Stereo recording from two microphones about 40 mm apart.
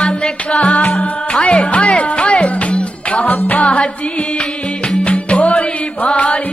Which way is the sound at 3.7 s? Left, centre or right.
Left.